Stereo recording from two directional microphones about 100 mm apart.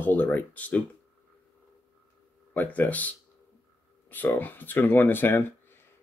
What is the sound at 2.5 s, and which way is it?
Speech, 15° left (ahead or behind).